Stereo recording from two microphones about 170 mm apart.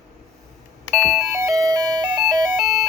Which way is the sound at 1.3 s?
20° right (ahead or behind).